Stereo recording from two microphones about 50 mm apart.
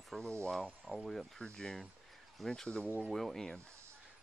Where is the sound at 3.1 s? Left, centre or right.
Centre.